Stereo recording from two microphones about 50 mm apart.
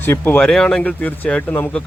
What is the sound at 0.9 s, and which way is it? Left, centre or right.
Speech, left.